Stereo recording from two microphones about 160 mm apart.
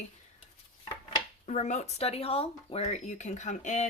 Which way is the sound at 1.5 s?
45° left (ahead or behind).